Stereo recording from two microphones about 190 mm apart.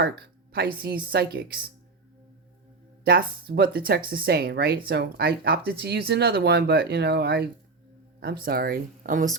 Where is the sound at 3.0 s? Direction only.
50° right (ahead or behind).